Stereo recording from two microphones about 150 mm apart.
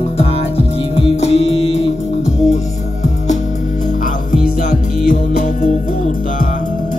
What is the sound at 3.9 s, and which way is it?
Music, 60° left (ahead or behind).